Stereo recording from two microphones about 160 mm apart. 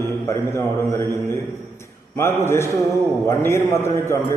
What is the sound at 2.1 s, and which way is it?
A man's voice, 15° left (ahead or behind).